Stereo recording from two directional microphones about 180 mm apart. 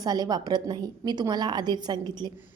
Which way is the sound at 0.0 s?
20° right (ahead or behind).